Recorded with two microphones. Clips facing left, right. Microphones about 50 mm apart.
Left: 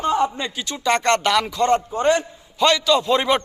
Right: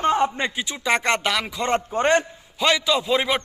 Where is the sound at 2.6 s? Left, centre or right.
Centre.